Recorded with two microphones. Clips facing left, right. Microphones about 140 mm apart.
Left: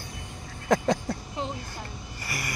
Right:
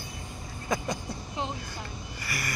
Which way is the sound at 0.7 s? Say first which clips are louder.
Left 7 dB; 80° left.